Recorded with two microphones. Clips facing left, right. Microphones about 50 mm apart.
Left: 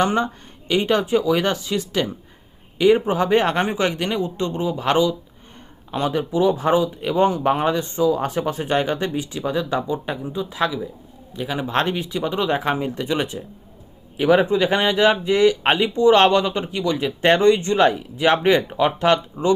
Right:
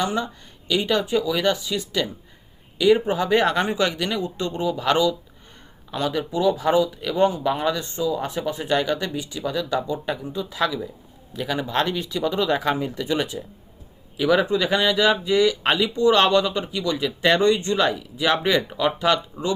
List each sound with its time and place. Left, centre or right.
0.0 s a man's voice: left
7.3 s speech: left
7.7 s speech: left
8.1 s speech: left
11.7 s speech: left
11.9 s speech: left